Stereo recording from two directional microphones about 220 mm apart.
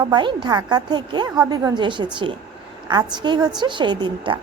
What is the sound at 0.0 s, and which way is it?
A woman's voice, 20° right (ahead or behind).